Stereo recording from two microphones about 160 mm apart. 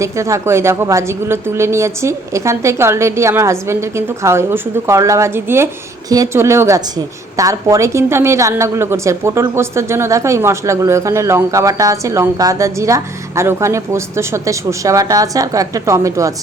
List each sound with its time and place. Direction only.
0.0 s a woman's voice: 20° right (ahead or behind)